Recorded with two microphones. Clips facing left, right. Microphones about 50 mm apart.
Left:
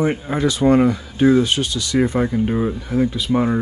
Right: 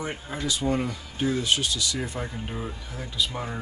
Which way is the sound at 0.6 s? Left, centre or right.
Left.